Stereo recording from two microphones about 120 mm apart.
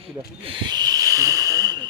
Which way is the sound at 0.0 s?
45° right (ahead or behind).